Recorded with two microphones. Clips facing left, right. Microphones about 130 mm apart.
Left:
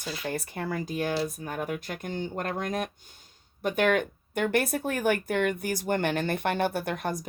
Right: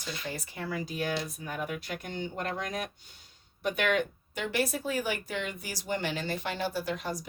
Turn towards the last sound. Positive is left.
turn(degrees=55)  # may be behind; listen again after turning